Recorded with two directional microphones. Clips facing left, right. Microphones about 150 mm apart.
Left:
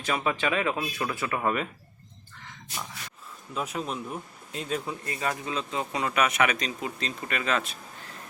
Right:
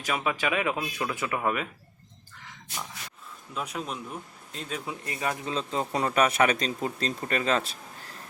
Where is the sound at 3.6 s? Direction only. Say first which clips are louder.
Left 2 dB; centre (ahead or behind).